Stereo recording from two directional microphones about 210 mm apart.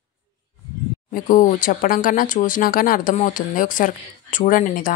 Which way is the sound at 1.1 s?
40° left (ahead or behind).